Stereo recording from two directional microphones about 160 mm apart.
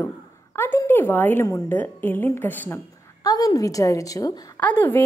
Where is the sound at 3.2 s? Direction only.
25° left (ahead or behind).